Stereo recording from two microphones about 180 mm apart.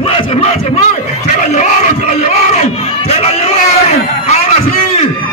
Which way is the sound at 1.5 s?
40° left (ahead or behind).